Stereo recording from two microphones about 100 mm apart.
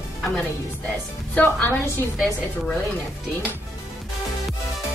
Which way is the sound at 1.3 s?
15° left (ahead or behind).